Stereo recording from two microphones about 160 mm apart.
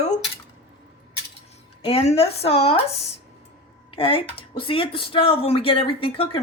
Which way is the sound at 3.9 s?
35° left (ahead or behind).